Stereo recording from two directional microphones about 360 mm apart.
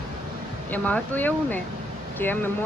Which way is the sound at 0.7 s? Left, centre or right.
Centre.